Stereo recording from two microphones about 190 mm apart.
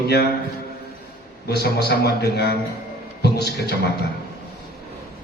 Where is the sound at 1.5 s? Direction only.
60° left (ahead or behind).